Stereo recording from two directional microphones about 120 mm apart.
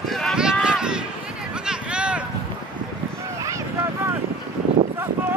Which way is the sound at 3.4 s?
25° right (ahead or behind).